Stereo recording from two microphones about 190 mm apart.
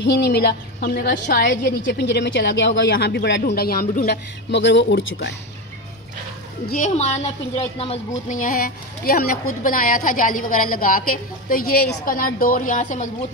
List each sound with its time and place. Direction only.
0.0 s speech: 60° left (ahead or behind)
1.9 s speech: 65° left (ahead or behind)
6.7 s a woman's voice: 40° left (ahead or behind)
8.4 s a woman's voice: 50° left (ahead or behind)